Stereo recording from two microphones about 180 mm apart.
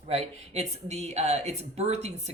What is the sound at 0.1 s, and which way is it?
Speech, 40° right (ahead or behind).